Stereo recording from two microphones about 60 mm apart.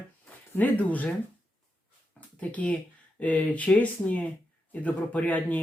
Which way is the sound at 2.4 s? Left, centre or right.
Left.